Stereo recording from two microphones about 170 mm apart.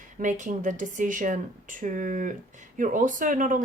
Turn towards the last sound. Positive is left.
turn(degrees=-50)  # may be behind; listen again after turning